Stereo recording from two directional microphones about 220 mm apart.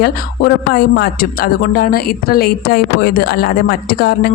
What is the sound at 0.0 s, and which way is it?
Speech, 45° left (ahead or behind).